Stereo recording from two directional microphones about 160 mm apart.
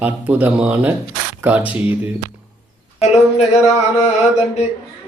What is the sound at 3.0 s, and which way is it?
Mantra, 45° left (ahead or behind).